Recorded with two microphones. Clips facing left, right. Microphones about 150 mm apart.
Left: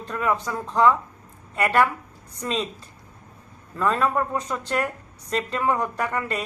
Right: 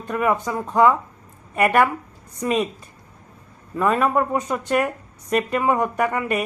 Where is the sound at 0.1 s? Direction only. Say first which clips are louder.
Right 4 dB; 20° right (ahead or behind).